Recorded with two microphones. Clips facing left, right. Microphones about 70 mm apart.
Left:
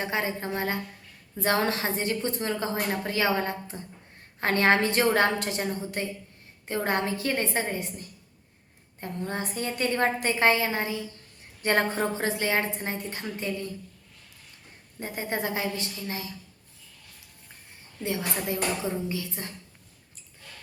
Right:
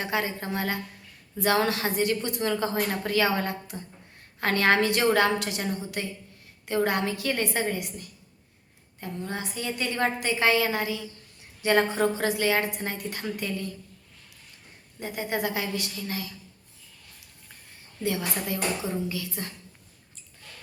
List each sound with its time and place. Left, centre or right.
0.0 s a woman's voice: left
11.6 s a woman's voice: left
11.9 s a woman's voice: left
14.9 s a woman's voice: left
18.0 s a woman's voice: left